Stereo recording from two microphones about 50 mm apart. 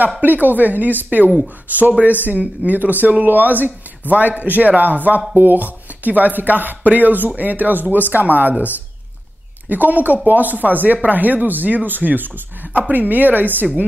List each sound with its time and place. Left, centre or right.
0.2 s speech: right
9.7 s speech: right